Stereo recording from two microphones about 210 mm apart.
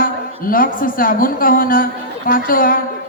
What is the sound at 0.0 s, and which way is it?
A woman's voice, 40° left (ahead or behind).